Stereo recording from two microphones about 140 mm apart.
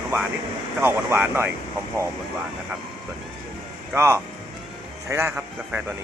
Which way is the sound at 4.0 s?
20° right (ahead or behind).